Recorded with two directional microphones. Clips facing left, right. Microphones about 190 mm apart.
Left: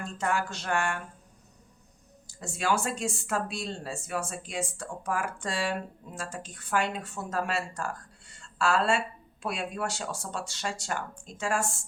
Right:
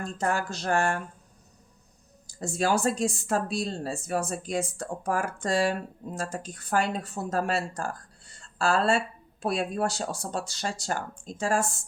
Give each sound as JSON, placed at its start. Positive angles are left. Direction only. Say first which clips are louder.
{"t": 0.0, "sound": "speech", "louder": "right 2 dB", "side_deg": -40}
{"t": 2.2, "sound": "speech", "louder": "right 4 dB", "side_deg": -40}